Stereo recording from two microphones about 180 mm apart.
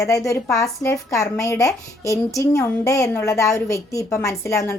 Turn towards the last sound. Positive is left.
turn(degrees=15)  # may be behind; listen again after turning